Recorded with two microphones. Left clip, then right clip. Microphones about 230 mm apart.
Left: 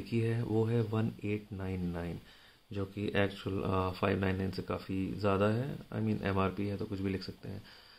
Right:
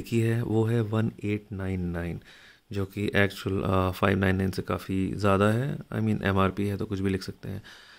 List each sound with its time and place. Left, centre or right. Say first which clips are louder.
0.0 s speech: right 7 dB; right